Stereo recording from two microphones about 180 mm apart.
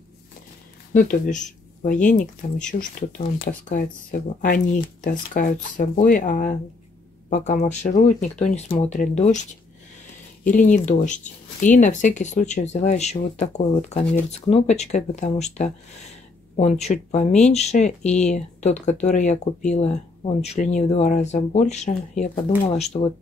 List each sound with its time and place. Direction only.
0.9 s speech: 50° left (ahead or behind)